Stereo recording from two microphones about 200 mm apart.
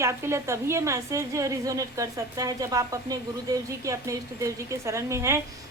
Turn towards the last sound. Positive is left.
turn(degrees=-15)  # may be behind; listen again after turning